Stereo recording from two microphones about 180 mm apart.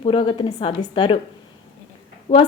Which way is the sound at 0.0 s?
30° left (ahead or behind).